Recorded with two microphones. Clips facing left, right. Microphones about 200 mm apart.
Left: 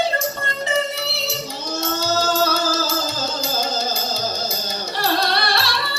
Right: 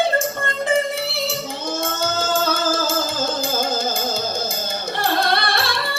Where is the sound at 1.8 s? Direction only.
50° right (ahead or behind).